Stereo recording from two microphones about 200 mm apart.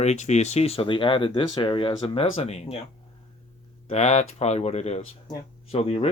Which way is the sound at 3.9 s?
35° left (ahead or behind).